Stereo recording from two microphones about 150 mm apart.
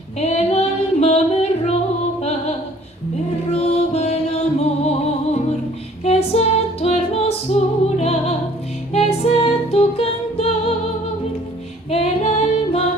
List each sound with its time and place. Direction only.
0.2 s female singing: 45° left (ahead or behind)
3.5 s music: 45° left (ahead or behind)
11.9 s music: 45° left (ahead or behind)